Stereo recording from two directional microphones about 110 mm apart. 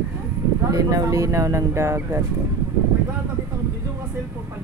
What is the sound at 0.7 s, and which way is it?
Speech, 35° right (ahead or behind).